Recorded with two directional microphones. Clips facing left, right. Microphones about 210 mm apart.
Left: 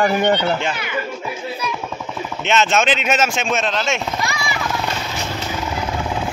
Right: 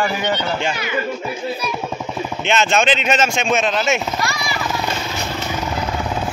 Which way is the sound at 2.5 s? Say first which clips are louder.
Even; centre (ahead or behind).